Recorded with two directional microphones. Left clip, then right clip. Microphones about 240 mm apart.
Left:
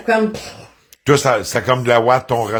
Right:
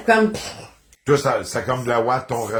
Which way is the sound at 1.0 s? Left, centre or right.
Left.